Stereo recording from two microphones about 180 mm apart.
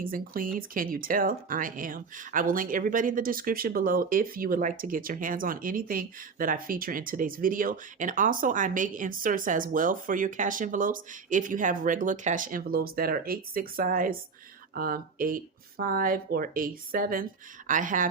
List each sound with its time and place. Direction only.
0.0 s speech: 50° right (ahead or behind)